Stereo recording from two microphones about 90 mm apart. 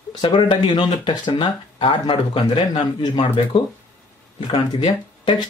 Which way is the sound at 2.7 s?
65° left (ahead or behind).